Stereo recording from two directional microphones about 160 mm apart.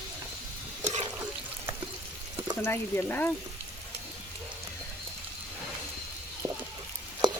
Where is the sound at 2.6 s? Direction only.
15° left (ahead or behind).